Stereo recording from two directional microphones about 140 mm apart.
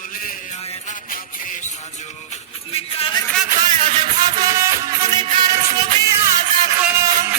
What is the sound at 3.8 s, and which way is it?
Music, 35° right (ahead or behind).